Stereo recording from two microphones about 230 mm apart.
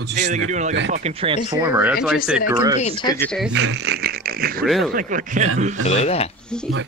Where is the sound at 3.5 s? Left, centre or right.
Right.